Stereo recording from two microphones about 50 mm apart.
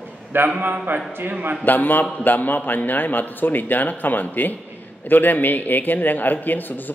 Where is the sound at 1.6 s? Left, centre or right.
Left.